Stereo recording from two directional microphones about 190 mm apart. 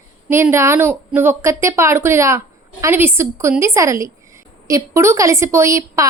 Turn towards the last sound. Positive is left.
turn(degrees=-15)  # may be behind; listen again after turning